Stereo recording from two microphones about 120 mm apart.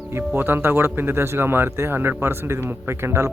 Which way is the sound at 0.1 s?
20° right (ahead or behind).